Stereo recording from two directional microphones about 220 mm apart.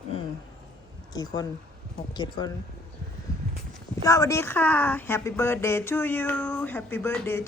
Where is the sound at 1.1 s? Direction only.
20° left (ahead or behind).